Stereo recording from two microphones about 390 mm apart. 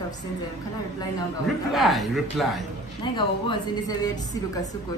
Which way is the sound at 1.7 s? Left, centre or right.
Centre.